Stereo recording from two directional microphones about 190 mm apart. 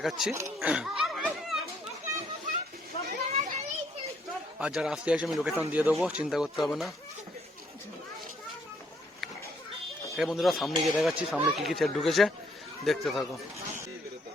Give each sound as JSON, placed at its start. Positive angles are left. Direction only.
{"t": 0.0, "sound": "speech", "side_deg": 0}
{"t": 0.3, "sound": "laughter", "side_deg": -10}
{"t": 3.1, "sound": "children playing", "side_deg": -40}
{"t": 4.6, "sound": "speech", "side_deg": -5}
{"t": 10.2, "sound": "speech", "side_deg": 0}